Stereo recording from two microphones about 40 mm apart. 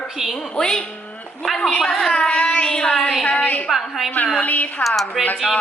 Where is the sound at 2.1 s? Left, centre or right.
Left.